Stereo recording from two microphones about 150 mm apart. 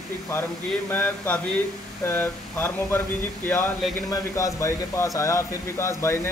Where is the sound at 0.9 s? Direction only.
15° left (ahead or behind).